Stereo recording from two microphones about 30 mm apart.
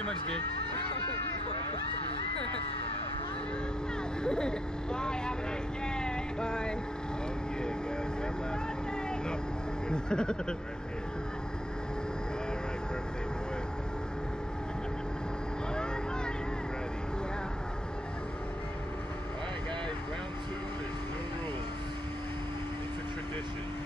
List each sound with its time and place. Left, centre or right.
4.2 s speech: left
5.9 s vehicle: left
9.8 s speech: left